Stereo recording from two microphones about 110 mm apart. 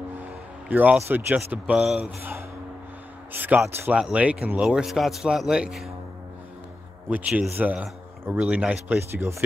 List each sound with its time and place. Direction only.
0.2 s a sound: 15° right (ahead or behind)
1.0 s a man's voice: 15° right (ahead or behind)
2.0 s a man's voice: 20° right (ahead or behind); by 5.9 s centre (ahead or behind)
7.1 s a man's voice: 15° right (ahead or behind)